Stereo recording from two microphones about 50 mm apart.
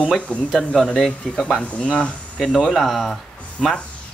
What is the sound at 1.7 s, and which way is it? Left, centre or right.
Speech, left.